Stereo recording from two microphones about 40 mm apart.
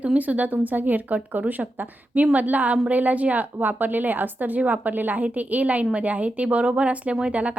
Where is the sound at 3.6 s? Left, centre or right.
Right.